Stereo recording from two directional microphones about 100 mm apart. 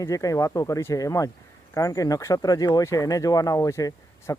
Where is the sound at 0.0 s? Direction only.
35° left (ahead or behind).